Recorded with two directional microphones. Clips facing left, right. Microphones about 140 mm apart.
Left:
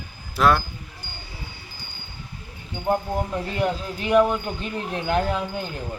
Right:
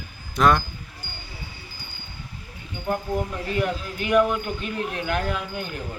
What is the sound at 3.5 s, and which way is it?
Speech, 30° left (ahead or behind).